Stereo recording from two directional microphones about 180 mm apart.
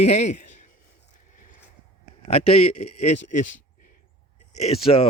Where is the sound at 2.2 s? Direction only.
35° left (ahead or behind).